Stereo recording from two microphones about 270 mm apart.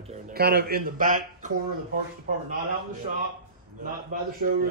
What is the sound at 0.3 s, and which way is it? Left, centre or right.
Speech, right.